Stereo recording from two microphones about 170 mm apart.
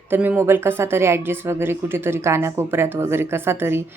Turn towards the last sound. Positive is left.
turn(degrees=-15)  # may be behind; listen again after turning